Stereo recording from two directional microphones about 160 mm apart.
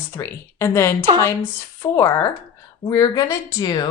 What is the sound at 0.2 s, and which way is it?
Speech, 15° left (ahead or behind).